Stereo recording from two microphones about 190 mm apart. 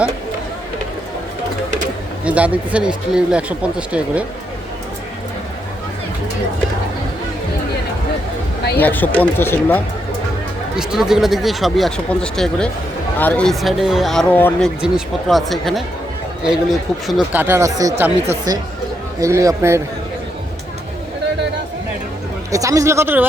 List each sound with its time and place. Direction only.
2.2 s speech: 5° right (ahead or behind)
8.8 s speech: 10° left (ahead or behind)
10.8 s speech: 5° right (ahead or behind)
22.5 s speech: 15° right (ahead or behind)